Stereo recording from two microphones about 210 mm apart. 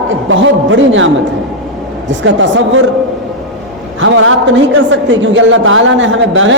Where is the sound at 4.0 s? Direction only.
65° right (ahead or behind).